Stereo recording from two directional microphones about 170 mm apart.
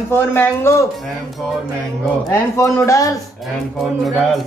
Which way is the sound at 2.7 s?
20° left (ahead or behind).